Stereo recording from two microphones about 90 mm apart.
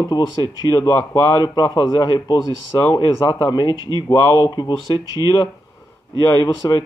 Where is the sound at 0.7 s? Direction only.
40° left (ahead or behind).